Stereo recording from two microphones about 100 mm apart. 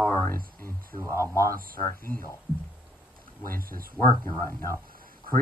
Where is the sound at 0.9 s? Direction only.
30° right (ahead or behind).